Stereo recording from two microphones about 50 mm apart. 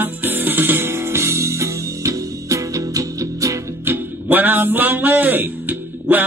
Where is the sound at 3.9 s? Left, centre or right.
Right.